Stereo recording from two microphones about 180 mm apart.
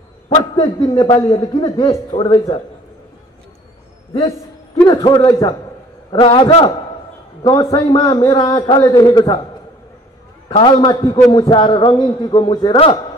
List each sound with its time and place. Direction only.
0.3 s a man's voice: 20° left (ahead or behind)
4.8 s a man's voice: 25° left (ahead or behind)
6.1 s a man's voice: 30° left (ahead or behind)
7.7 s a man's voice: 20° left (ahead or behind)
10.5 s a man's voice: 25° left (ahead or behind)